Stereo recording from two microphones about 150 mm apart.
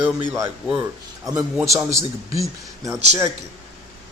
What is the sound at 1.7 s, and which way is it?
A man's voice, 20° right (ahead or behind).